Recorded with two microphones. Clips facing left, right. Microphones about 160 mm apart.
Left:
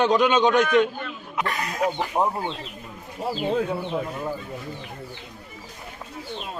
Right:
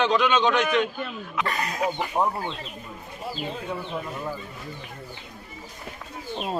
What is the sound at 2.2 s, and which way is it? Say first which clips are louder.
Speech: left 1 dB; 15° left (ahead or behind).